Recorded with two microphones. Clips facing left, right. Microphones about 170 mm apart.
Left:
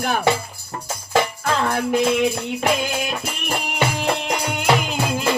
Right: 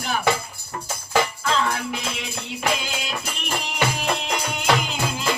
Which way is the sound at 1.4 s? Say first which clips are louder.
Left 3 dB; 55° left (ahead or behind).